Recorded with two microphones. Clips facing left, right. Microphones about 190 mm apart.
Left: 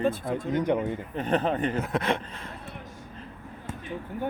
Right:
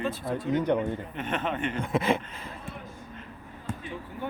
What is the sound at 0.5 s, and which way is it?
Speech, 10° left (ahead or behind).